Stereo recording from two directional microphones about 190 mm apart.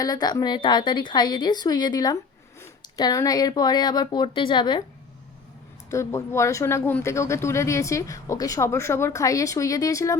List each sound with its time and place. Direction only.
0.0 s speech: 20° left (ahead or behind)
5.9 s speech: 15° left (ahead or behind)